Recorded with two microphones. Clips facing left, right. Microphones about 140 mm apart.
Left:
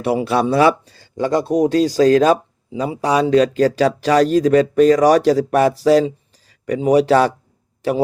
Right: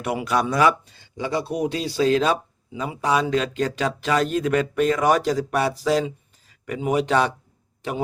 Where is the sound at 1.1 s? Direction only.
45° left (ahead or behind).